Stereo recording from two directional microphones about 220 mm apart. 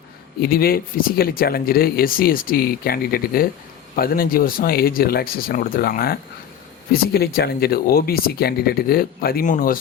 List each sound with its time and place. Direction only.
0.4 s speech: 45° left (ahead or behind)